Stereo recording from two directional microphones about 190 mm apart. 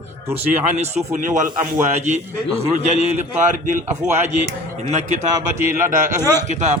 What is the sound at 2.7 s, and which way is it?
A man's voice, 35° right (ahead or behind).